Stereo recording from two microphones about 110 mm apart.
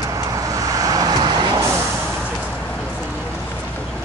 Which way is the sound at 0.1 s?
30° right (ahead or behind).